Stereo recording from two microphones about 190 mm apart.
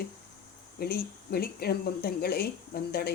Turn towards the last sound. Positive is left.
turn(degrees=55)  # may be behind; listen again after turning